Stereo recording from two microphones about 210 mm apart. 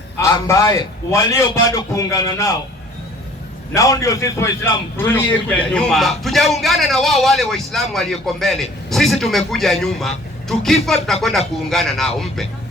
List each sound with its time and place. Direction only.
0.2 s a man's voice: 15° left (ahead or behind)
3.8 s a man's voice: 15° left (ahead or behind)